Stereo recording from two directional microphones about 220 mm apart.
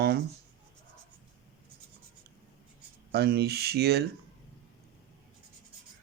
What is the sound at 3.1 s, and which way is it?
Speech, 45° right (ahead or behind).